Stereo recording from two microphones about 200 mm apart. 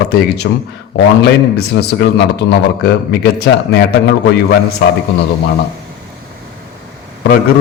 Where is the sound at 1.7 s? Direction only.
55° left (ahead or behind).